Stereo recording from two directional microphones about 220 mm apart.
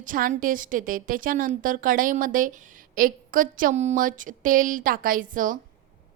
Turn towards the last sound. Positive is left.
turn(degrees=-40)  # may be behind; listen again after turning